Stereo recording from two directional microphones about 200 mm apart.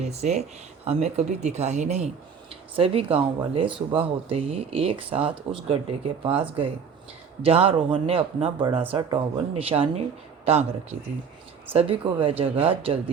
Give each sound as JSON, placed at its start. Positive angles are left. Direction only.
{"t": 0.0, "sound": "speech", "side_deg": -35}
{"t": 7.4, "sound": "speech", "side_deg": -30}